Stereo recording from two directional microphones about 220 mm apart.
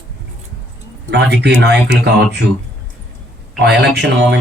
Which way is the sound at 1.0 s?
50° right (ahead or behind).